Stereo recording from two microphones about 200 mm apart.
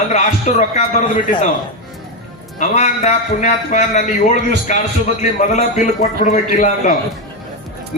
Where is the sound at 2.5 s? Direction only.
35° left (ahead or behind).